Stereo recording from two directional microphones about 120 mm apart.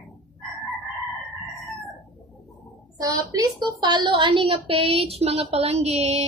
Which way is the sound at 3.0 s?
35° right (ahead or behind).